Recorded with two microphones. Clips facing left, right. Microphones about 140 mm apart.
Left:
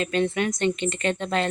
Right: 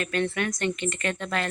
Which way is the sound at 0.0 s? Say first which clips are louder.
Left 3 dB; 20° left (ahead or behind).